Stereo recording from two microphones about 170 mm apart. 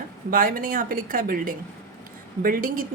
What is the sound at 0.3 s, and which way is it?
A woman's voice, 55° right (ahead or behind).